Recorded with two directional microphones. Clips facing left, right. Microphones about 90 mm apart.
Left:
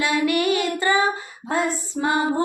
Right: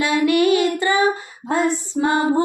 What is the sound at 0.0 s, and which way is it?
Child singing, 25° right (ahead or behind).